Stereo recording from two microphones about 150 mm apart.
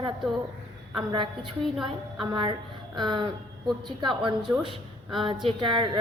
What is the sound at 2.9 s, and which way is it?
A woman's voice, 30° right (ahead or behind).